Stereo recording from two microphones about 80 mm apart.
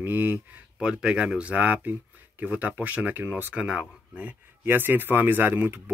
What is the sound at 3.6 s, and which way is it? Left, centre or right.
Speech, centre.